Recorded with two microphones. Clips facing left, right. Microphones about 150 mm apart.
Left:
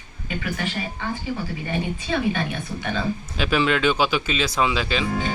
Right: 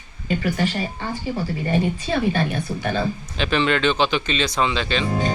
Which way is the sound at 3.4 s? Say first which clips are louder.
Right 1 dB; 5° left (ahead or behind).